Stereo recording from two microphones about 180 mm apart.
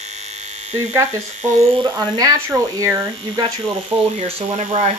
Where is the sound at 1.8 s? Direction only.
20° right (ahead or behind).